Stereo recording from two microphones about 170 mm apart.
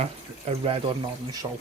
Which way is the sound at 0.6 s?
30° right (ahead or behind).